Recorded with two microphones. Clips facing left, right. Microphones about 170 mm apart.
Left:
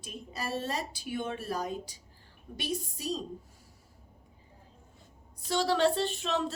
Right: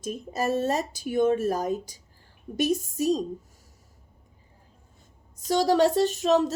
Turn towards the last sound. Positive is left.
turn(degrees=-40)  # may be behind; listen again after turning